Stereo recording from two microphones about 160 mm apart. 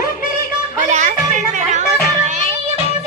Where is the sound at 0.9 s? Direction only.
50° right (ahead or behind).